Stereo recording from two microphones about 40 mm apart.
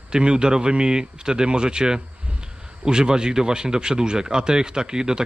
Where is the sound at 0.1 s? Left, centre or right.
Right.